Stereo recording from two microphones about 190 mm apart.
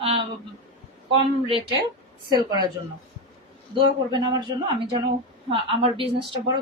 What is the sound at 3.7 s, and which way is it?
Speech, 25° right (ahead or behind).